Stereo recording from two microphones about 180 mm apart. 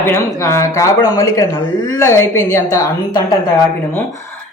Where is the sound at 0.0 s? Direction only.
15° left (ahead or behind).